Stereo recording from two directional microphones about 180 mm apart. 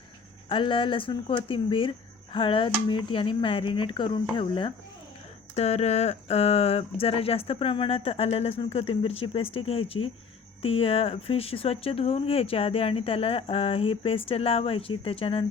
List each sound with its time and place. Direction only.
0.4 s speech: 30° left (ahead or behind)